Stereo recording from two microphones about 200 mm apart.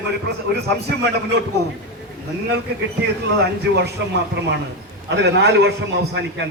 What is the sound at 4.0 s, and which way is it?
A man's voice, 60° right (ahead or behind).